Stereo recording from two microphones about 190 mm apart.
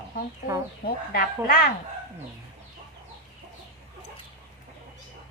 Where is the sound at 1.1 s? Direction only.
50° left (ahead or behind).